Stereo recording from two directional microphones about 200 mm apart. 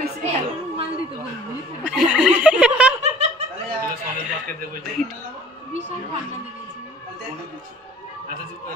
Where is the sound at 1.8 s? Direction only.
5° right (ahead or behind).